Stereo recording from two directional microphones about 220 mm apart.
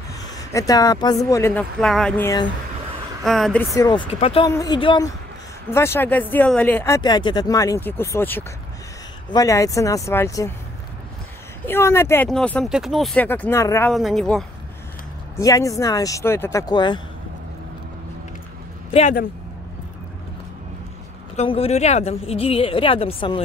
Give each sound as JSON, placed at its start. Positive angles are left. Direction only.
{"t": 0.2, "sound": "speech", "side_deg": 15}
{"t": 3.3, "sound": "speech", "side_deg": 0}
{"t": 3.7, "sound": "a woman's voice", "side_deg": 20}
{"t": 4.5, "sound": "speech", "side_deg": 15}
{"t": 11.6, "sound": "speech", "side_deg": 10}
{"t": 13.9, "sound": "speech", "side_deg": 0}
{"t": 15.3, "sound": "speech", "side_deg": 15}
{"t": 18.9, "sound": "speech", "side_deg": 30}
{"t": 21.4, "sound": "a woman's voice", "side_deg": 25}